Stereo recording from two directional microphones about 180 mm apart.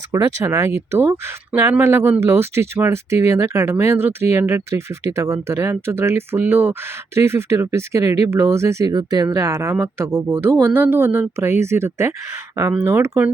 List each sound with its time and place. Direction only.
0.1 s speech: 15° right (ahead or behind)